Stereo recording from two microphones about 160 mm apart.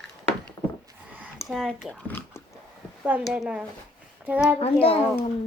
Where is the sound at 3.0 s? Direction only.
10° right (ahead or behind).